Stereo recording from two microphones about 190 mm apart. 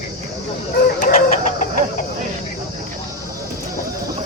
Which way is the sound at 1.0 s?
40° left (ahead or behind).